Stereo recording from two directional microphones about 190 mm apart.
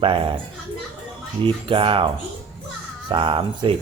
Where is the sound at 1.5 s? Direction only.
25° right (ahead or behind).